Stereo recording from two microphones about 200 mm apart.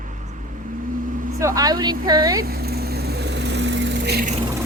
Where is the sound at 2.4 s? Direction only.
50° right (ahead or behind).